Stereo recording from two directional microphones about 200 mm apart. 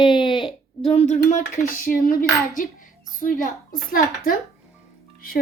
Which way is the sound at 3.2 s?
45° left (ahead or behind).